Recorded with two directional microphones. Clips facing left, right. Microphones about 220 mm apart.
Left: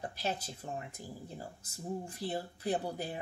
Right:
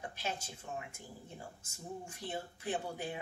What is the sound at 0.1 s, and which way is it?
Speech, 35° left (ahead or behind).